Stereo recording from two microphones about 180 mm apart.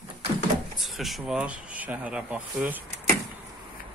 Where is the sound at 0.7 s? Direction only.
Centre (ahead or behind).